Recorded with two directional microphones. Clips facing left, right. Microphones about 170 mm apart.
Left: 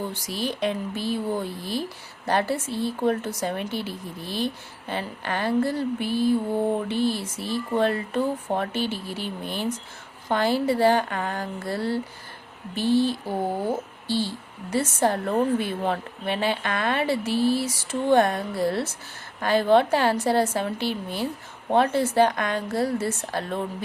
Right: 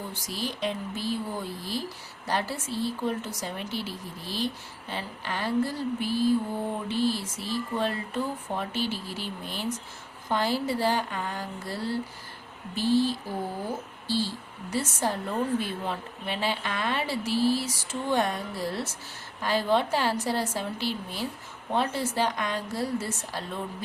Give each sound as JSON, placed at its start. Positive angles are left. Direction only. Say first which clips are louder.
{"t": 0.1, "sound": "speech", "louder": "left 5 dB", "side_deg": 70}